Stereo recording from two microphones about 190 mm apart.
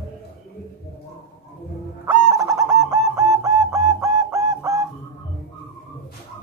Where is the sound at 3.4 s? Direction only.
15° right (ahead or behind).